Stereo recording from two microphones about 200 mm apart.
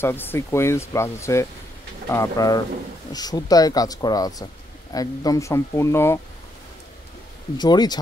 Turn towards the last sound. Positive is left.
turn(degrees=20)  # may be behind; listen again after turning